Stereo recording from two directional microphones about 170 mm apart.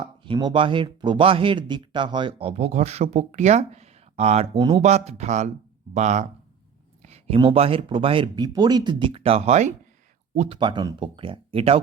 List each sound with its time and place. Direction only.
0.0 s speech: 30° right (ahead or behind)
7.0 s a sound: 40° right (ahead or behind)
7.3 s speech: 30° right (ahead or behind)
10.6 s speech: 25° right (ahead or behind)